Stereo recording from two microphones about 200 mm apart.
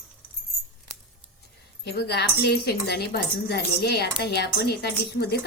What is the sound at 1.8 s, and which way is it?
Speech, 55° left (ahead or behind).